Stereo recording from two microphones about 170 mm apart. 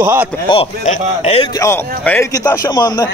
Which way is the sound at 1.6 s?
15° left (ahead or behind).